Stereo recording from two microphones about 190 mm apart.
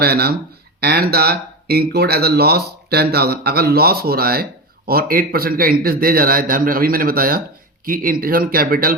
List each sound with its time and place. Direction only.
0.0 s speech: 55° right (ahead or behind)